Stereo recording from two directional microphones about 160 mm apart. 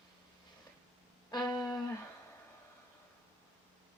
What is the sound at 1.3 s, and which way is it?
Music, 25° left (ahead or behind).